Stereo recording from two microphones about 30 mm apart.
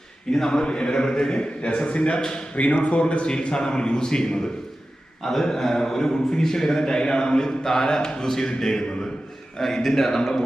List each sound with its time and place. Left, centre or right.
0.3 s a man's voice: centre
1.3 s speech: left
2.2 s a man's voice: left
2.6 s speech: left
3.5 s a man's voice: left
5.2 s a man's voice: centre
10.2 s a man's voice: centre